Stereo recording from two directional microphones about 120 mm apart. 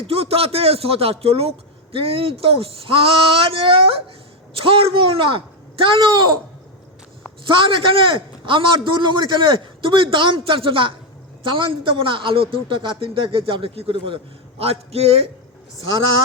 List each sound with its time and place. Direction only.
0.1 s a man's voice: 55° right (ahead or behind)
7.4 s a man's voice: 45° right (ahead or behind)